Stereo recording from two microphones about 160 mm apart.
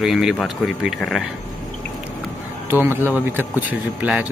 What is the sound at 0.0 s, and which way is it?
Speech, centre (ahead or behind).